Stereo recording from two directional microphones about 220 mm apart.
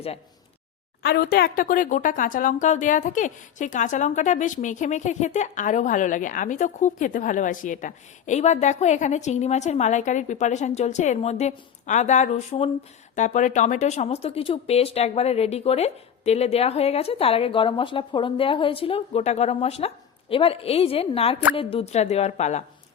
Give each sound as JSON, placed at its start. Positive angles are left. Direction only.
{"t": 1.0, "sound": "speech", "side_deg": 45}